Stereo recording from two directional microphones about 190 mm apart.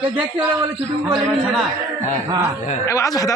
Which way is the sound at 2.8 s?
15° left (ahead or behind).